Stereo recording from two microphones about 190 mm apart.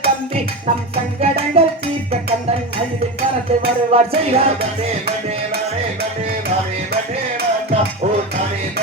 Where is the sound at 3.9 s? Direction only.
30° right (ahead or behind).